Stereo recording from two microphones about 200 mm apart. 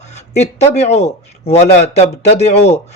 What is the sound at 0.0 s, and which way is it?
Speech, 35° left (ahead or behind).